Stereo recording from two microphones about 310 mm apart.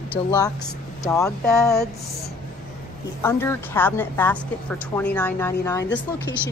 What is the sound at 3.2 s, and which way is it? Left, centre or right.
A woman's voice, centre.